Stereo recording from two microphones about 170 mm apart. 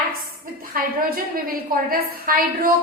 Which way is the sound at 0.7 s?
60° right (ahead or behind).